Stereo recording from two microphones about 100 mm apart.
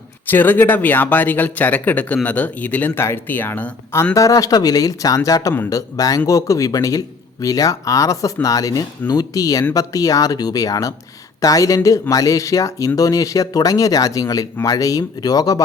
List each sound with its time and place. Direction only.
0.3 s speech: 20° left (ahead or behind)
4.1 s speech: 35° left (ahead or behind)